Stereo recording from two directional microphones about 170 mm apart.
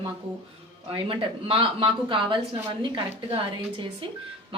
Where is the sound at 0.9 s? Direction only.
30° right (ahead or behind).